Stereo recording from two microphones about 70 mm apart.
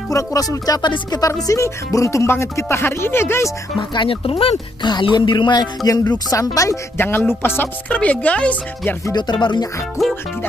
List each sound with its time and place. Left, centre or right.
0.1 s speech: left
1.5 s speech: left
4.8 s speech: left
5.9 s speech: left
7.0 s speech: left
7.9 s speech: left
9.1 s speech: left